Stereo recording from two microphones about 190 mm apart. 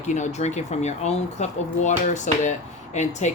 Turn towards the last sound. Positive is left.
turn(degrees=40)  # may be behind; listen again after turning